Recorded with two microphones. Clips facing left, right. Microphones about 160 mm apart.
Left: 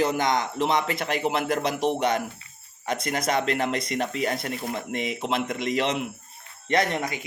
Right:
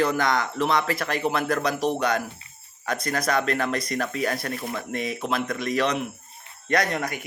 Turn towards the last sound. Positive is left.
turn(degrees=20)  # may be behind; listen again after turning